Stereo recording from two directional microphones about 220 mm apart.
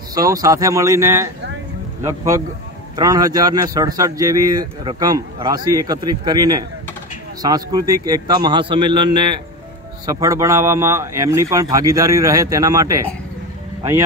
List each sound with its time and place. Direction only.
0.1 s a man's voice: 15° right (ahead or behind)